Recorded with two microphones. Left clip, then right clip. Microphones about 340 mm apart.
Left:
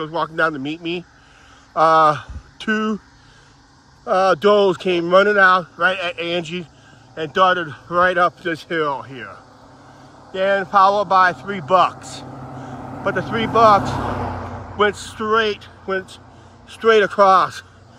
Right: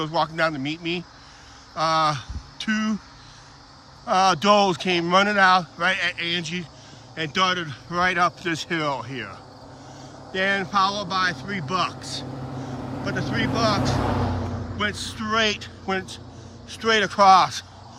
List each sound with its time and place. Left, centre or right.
0.0 s speech: centre
4.1 s speech: centre
13.9 s vehicle: left
14.8 s speech: centre